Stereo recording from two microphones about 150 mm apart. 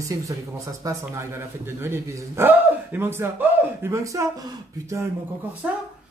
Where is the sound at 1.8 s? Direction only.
15° right (ahead or behind).